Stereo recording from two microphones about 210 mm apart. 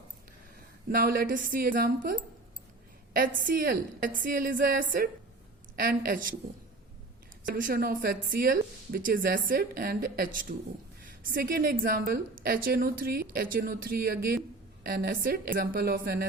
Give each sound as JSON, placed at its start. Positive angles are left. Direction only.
{"t": 0.9, "sound": "speech", "side_deg": -45}
{"t": 7.4, "sound": "a woman's voice", "side_deg": -40}